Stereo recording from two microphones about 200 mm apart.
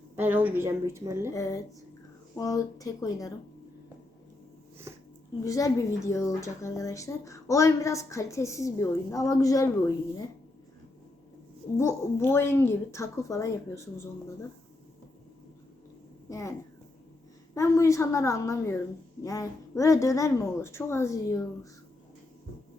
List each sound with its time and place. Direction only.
0.2 s a woman's voice: 10° right (ahead or behind)
1.3 s speech: 15° left (ahead or behind)
5.5 s speech: 15° left (ahead or behind)
11.8 s speech: 15° left (ahead or behind)
16.3 s speech: 15° left (ahead or behind)